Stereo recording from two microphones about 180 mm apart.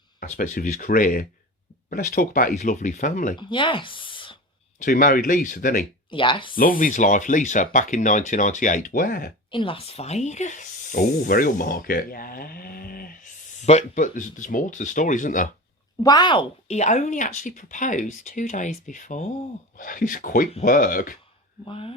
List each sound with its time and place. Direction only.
0.2 s speech: 45° left (ahead or behind)
3.3 s speech: 25° left (ahead or behind)
4.8 s speech: 50° left (ahead or behind)
6.1 s speech: 30° left (ahead or behind)
6.6 s speech: 50° left (ahead or behind)
9.5 s speech: 30° left (ahead or behind); by 13.1 s 55° left (ahead or behind)
13.7 s speech: 40° left (ahead or behind)
16.0 s speech: 25° left (ahead or behind); by 21.2 s 50° left (ahead or behind)
21.6 s speech: 30° left (ahead or behind)